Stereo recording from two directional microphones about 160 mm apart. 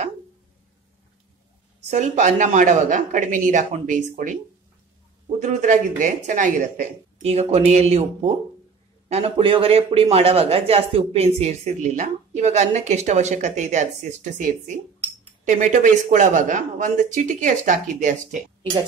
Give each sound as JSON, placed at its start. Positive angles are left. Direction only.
{"t": 1.9, "sound": "speech", "side_deg": -45}
{"t": 5.4, "sound": "speech", "side_deg": -50}